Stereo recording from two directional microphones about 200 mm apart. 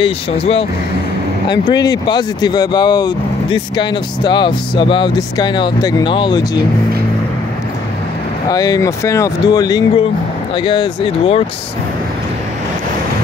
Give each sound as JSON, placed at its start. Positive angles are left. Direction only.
{"t": 0.0, "sound": "speech", "side_deg": 30}
{"t": 8.5, "sound": "speech", "side_deg": 20}